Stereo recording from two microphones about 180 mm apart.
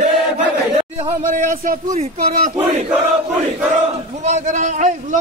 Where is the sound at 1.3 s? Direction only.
45° right (ahead or behind).